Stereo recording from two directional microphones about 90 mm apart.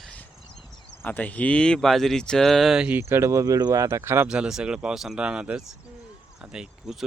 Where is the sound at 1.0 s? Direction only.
20° left (ahead or behind); by 3.0 s 10° right (ahead or behind).